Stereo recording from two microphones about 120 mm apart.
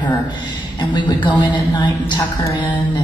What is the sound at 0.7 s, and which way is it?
A woman's voice, 40° left (ahead or behind).